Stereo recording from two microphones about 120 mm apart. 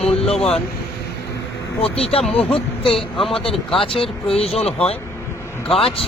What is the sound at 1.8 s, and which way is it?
A man's voice, 55° left (ahead or behind).